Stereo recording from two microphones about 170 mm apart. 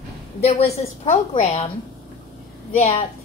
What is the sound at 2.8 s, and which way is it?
Speech, 40° left (ahead or behind).